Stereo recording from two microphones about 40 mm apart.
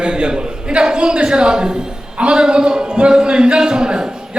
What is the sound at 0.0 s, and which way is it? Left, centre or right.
A man's voice, right.